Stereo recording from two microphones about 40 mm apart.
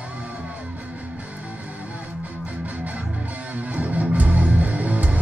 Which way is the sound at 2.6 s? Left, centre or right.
Right.